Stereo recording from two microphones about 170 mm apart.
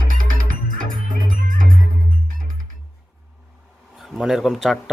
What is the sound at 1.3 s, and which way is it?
Music, 50° right (ahead or behind).